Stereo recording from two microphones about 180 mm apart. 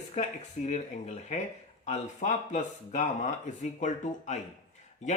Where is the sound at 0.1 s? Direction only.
40° left (ahead or behind).